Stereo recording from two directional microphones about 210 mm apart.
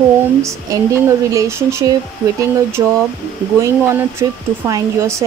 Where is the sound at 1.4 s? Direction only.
15° right (ahead or behind).